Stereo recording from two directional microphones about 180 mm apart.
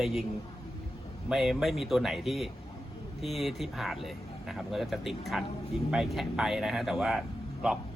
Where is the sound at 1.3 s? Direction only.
Centre (ahead or behind).